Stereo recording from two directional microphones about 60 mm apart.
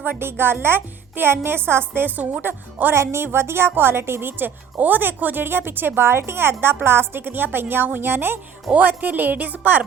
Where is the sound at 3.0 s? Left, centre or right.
Right.